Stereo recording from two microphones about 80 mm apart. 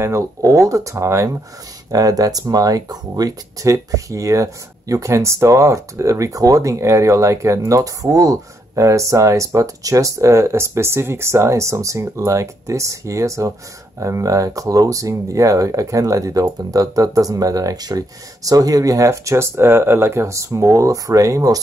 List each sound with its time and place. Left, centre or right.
0.0 s speech: right
1.9 s speech: right
3.7 s speech: right